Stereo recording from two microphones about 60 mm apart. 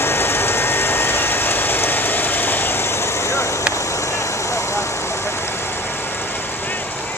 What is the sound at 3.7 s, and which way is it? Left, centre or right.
Vehicle, left.